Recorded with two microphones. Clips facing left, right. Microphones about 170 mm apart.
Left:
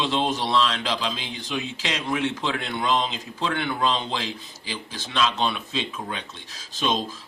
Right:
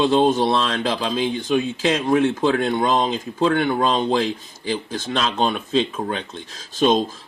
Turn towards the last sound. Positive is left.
turn(degrees=-45)  # may be behind; listen again after turning